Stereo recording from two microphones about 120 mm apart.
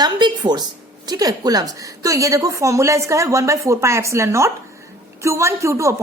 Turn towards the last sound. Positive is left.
turn(degrees=-25)  # may be behind; listen again after turning